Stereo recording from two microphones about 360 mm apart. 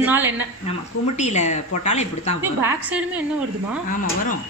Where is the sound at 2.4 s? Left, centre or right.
Centre.